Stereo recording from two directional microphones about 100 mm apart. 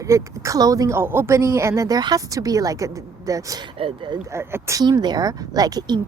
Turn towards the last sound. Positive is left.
turn(degrees=-45)  # may be behind; listen again after turning